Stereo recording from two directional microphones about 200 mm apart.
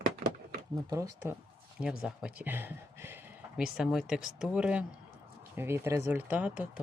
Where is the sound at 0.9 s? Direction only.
15° right (ahead or behind).